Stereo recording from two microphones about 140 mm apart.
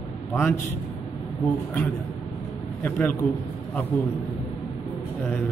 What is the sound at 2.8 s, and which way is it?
Speech, 15° left (ahead or behind).